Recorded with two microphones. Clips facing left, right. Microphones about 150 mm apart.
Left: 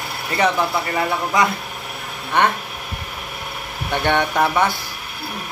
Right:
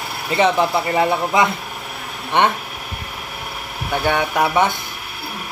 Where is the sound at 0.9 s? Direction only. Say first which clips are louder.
Right 3 dB; 25° right (ahead or behind).